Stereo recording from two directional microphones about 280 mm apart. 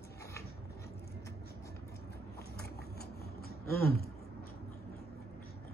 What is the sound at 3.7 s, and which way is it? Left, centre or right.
Speech, left.